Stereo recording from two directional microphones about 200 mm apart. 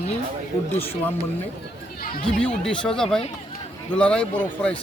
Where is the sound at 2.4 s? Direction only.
5° left (ahead or behind).